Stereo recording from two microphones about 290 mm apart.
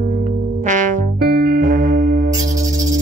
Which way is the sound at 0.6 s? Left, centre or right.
Right.